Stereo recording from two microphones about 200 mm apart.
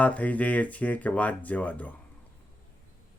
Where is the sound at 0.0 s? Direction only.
5° left (ahead or behind).